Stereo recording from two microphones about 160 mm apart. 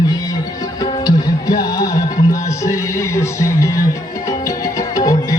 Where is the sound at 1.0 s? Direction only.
25° left (ahead or behind).